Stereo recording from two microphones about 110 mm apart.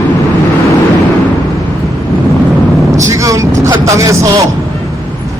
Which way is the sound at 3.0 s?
30° right (ahead or behind).